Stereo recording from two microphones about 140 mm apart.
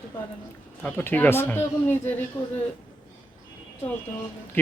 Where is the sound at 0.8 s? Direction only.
15° left (ahead or behind).